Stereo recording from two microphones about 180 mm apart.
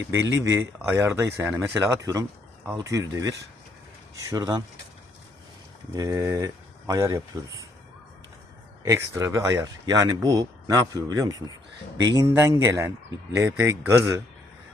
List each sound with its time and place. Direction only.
0.4 s speech: 15° right (ahead or behind)
5.9 s speech: 20° right (ahead or behind)
8.8 s speech: 15° right (ahead or behind)